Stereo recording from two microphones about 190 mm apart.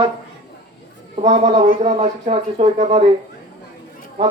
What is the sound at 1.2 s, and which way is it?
Speech, 40° right (ahead or behind).